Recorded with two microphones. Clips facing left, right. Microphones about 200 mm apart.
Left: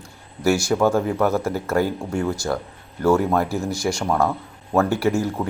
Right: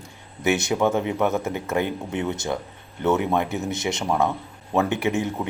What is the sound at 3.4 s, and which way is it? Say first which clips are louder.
Speech: left 2 dB; 35° left (ahead or behind).